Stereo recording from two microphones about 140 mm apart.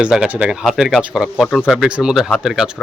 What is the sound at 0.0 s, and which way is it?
Speech, 5° right (ahead or behind).